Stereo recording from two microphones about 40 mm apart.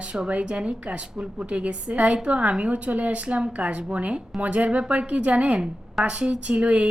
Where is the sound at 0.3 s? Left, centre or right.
Right.